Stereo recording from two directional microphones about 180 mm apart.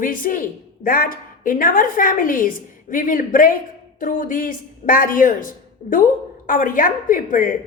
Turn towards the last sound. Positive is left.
turn(degrees=50)  # may be behind; listen again after turning